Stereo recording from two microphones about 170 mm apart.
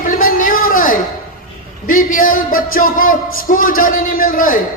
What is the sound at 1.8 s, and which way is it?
Speech, 50° left (ahead or behind).